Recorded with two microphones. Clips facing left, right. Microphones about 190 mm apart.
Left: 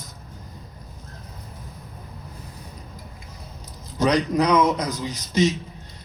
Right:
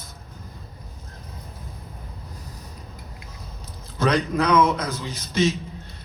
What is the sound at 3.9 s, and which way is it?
A man's voice, 40° left (ahead or behind).